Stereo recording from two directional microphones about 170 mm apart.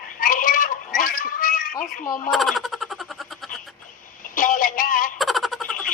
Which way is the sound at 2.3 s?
Centre (ahead or behind).